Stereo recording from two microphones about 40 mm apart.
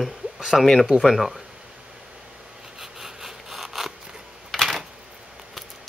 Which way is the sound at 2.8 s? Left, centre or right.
Centre.